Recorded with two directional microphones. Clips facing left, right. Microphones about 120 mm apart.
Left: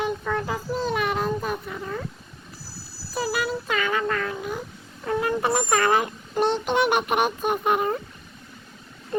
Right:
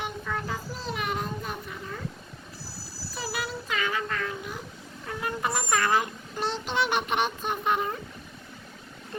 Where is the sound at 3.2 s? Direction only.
50° left (ahead or behind).